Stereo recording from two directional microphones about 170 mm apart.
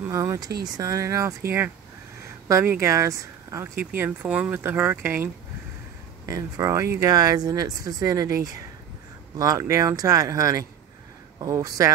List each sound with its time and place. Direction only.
0.1 s speech: 15° right (ahead or behind)